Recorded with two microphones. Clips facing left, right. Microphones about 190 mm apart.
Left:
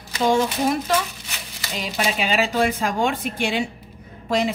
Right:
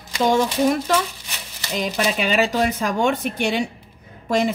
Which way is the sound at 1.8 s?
45° right (ahead or behind).